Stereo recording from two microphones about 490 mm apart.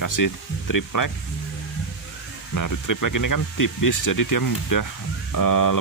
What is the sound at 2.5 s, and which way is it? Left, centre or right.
Speech, left.